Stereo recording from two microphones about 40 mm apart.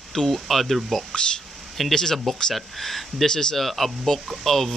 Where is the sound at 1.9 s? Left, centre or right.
Centre.